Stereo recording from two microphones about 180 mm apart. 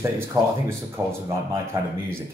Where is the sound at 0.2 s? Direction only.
15° right (ahead or behind).